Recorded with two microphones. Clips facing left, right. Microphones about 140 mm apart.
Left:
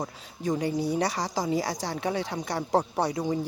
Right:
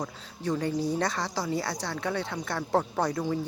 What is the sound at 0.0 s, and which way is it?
Speech, 20° left (ahead or behind).